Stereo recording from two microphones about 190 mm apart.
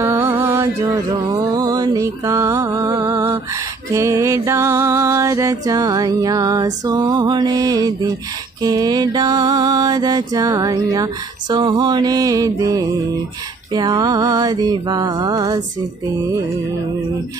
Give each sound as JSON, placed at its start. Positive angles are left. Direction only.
{"t": 0.0, "sound": "music", "side_deg": -15}